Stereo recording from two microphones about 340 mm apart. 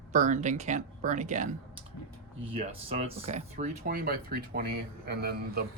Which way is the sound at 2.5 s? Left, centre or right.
Centre.